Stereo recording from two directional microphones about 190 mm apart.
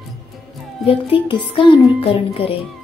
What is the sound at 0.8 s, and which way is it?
A child's voice, 30° left (ahead or behind).